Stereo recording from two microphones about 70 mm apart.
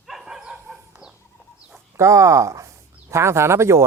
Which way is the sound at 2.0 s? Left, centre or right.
Right.